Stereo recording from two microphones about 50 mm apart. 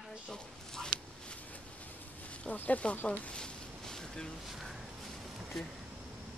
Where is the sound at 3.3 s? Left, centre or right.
Centre.